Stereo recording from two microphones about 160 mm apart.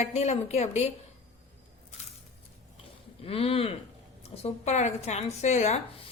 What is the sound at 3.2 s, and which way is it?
A woman's voice, 35° left (ahead or behind).